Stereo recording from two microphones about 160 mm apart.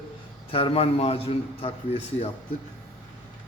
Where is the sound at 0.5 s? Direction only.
35° left (ahead or behind).